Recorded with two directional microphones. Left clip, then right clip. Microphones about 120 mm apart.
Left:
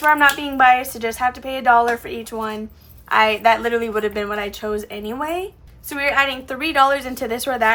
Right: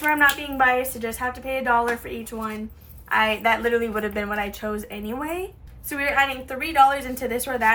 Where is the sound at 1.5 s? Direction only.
40° left (ahead or behind).